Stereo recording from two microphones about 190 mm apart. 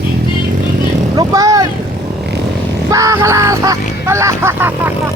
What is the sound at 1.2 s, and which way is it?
Vehicle, 20° right (ahead or behind).